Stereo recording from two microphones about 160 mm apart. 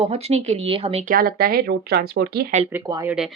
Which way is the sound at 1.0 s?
60° right (ahead or behind).